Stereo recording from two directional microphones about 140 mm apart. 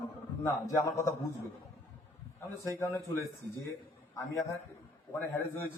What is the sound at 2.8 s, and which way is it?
A man's voice, 20° left (ahead or behind).